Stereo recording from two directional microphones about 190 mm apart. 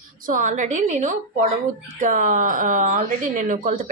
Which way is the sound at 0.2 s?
45° right (ahead or behind).